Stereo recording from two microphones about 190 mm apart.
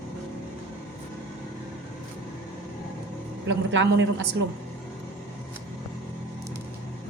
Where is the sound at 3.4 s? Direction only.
75° right (ahead or behind).